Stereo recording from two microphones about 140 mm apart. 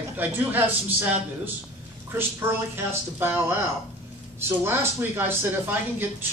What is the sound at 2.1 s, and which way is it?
A man's voice, 15° right (ahead or behind).